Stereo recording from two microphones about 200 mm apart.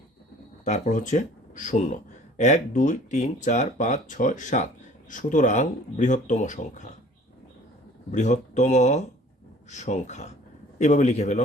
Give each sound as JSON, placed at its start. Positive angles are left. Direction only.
{"t": 0.6, "sound": "speech", "side_deg": 35}
{"t": 8.1, "sound": "speech", "side_deg": 35}